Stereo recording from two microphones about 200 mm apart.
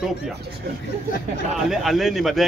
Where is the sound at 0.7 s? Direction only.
50° right (ahead or behind).